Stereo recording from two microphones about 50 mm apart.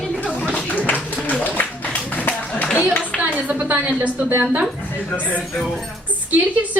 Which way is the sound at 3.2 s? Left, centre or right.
Right.